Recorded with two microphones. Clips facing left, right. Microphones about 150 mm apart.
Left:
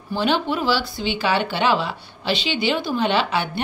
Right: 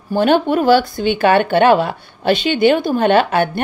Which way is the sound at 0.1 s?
50° right (ahead or behind).